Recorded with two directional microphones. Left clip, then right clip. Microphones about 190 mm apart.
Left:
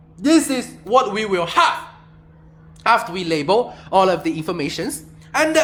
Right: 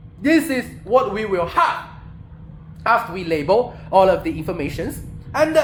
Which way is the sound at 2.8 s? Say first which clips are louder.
Left 1 dB; 30° left (ahead or behind).